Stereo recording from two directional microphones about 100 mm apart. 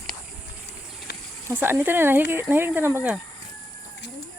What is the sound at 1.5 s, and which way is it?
Speech, 20° right (ahead or behind).